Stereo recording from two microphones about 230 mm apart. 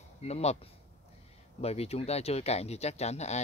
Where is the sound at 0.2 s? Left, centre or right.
Left.